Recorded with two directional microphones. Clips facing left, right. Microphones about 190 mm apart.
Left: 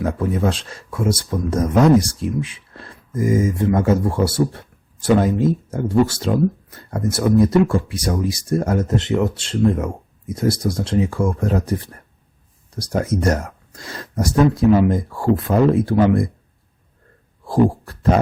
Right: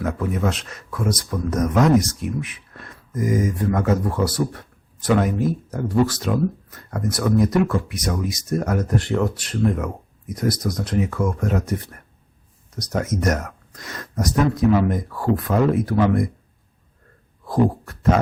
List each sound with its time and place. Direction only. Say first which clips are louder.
0.0 s speech: left 3 dB; 30° left (ahead or behind)
17.4 s speech: left 3 dB; 30° left (ahead or behind)